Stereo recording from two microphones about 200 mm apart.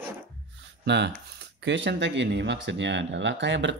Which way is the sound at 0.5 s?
60° right (ahead or behind).